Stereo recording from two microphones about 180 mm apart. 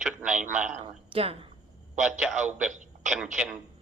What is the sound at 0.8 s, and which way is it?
Speech, 30° right (ahead or behind).